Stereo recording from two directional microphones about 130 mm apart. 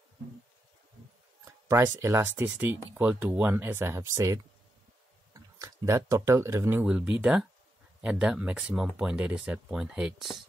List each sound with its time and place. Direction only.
1.4 s speech: 25° right (ahead or behind); by 10.4 s centre (ahead or behind)